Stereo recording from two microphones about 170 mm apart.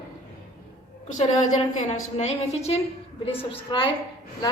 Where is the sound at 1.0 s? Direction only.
45° left (ahead or behind).